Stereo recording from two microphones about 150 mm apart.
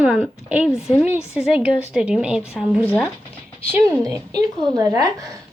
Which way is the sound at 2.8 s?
10° left (ahead or behind).